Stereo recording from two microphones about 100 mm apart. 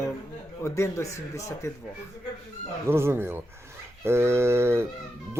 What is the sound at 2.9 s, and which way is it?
Speech, 25° right (ahead or behind).